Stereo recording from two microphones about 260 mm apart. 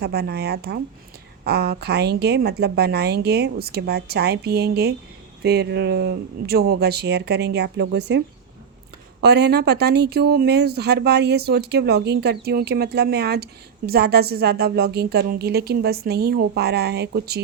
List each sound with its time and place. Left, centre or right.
0.0 s speech: right
9.2 s speech: right